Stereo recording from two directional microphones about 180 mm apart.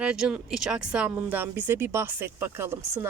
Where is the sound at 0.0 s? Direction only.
5° right (ahead or behind).